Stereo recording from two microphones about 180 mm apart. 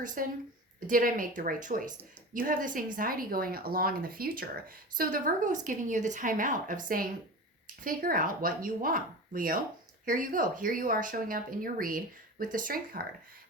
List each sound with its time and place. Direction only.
0.0 s a woman's voice: 50° right (ahead or behind)